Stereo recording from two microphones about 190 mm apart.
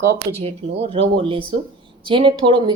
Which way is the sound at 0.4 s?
30° right (ahead or behind).